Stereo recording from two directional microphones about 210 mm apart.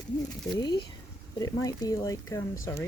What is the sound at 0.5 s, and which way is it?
Speech, 20° left (ahead or behind).